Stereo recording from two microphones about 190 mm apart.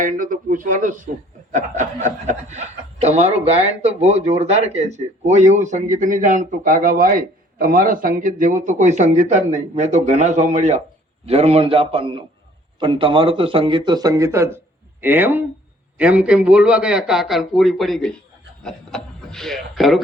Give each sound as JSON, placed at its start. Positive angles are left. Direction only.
{"t": 0.0, "sound": "a man's voice", "side_deg": -45}